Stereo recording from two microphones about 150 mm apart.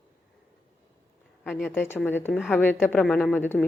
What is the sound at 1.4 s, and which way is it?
A woman's voice, 5° left (ahead or behind).